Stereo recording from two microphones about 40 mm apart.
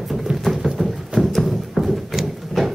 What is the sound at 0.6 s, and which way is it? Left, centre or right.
Music, centre.